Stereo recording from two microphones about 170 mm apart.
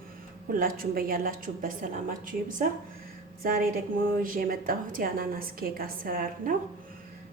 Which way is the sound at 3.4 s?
60° right (ahead or behind).